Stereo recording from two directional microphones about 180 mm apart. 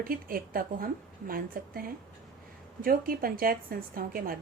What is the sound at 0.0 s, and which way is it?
A woman's voice, 55° right (ahead or behind).